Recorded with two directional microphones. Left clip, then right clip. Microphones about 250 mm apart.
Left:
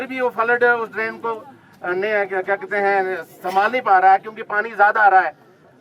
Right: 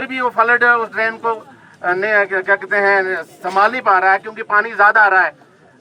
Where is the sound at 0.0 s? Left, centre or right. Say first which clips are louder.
Right 5 dB; centre.